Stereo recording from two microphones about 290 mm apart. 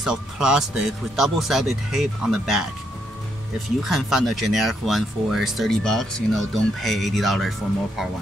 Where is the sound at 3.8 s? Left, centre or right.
Centre.